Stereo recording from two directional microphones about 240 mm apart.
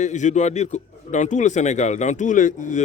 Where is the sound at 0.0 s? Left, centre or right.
Left.